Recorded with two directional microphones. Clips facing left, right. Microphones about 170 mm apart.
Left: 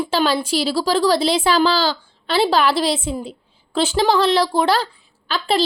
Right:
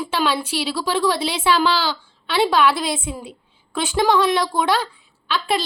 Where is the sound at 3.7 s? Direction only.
30° left (ahead or behind).